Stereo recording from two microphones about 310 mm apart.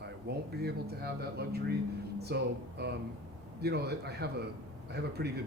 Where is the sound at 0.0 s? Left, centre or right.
Right.